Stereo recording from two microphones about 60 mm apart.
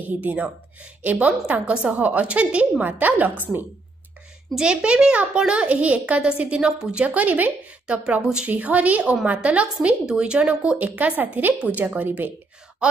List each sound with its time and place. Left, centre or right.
0.2 s a woman's voice: right
4.6 s a child's voice: centre
8.5 s a woman's voice: right